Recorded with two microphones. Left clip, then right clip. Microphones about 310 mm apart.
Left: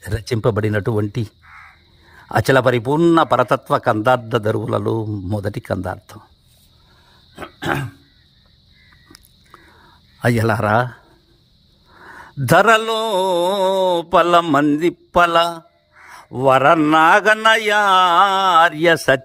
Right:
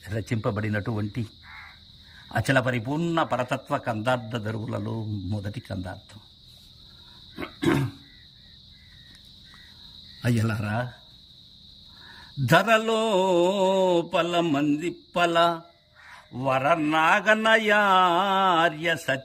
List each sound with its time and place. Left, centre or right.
0.2 s speech: centre
2.3 s mantra: centre
7.3 s a sound: centre
10.2 s mantra: centre
12.1 s mantra: centre
16.7 s mantra: centre